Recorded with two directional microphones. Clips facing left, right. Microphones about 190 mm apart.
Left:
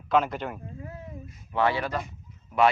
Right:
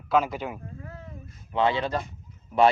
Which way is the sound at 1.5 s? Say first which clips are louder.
Right 1 dB; 20° right (ahead or behind).